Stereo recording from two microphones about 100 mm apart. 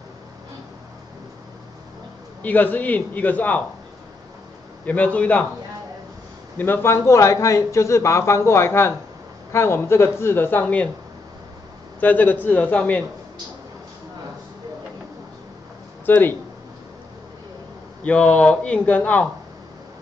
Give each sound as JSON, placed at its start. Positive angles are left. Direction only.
{"t": 2.4, "sound": "a man's voice", "side_deg": 15}
{"t": 4.8, "sound": "a man's voice", "side_deg": 15}
{"t": 6.6, "sound": "speech", "side_deg": 25}
{"t": 12.0, "sound": "a man's voice", "side_deg": 15}
{"t": 16.1, "sound": "speech", "side_deg": 20}
{"t": 18.0, "sound": "a man's voice", "side_deg": 10}